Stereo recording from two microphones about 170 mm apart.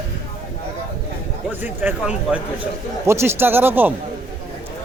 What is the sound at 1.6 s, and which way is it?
Speech, 10° right (ahead or behind).